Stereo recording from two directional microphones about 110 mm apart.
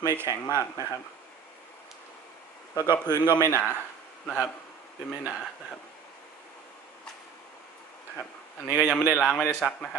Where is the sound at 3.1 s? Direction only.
35° left (ahead or behind).